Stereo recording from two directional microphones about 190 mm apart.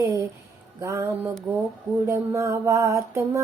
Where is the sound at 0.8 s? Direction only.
15° right (ahead or behind).